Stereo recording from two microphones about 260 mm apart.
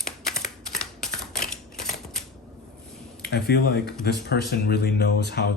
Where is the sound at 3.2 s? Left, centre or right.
Left.